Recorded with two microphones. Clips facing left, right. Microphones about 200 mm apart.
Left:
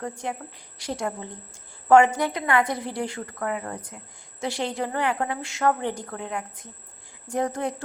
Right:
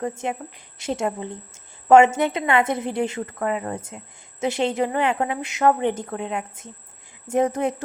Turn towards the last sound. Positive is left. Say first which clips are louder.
# right 5 dB
turn(degrees=-20)  # may be behind; listen again after turning